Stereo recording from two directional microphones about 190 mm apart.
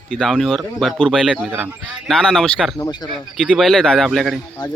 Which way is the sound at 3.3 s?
5° right (ahead or behind).